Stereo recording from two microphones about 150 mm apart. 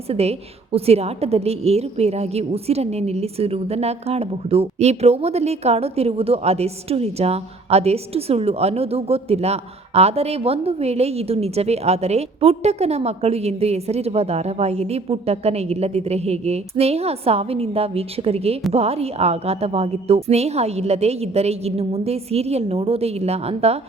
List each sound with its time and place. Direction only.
0.1 s a woman's voice: 45° right (ahead or behind)